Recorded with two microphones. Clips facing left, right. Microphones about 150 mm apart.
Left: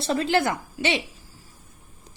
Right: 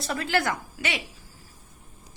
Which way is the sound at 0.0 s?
25° left (ahead or behind).